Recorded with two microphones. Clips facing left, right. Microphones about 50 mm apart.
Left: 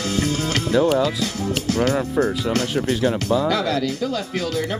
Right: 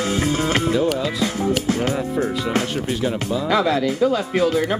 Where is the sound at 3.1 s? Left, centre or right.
Centre.